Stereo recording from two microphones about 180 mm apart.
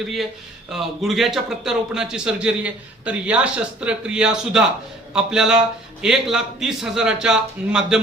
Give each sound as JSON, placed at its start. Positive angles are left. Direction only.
{"t": 0.7, "sound": "a man's voice", "side_deg": 0}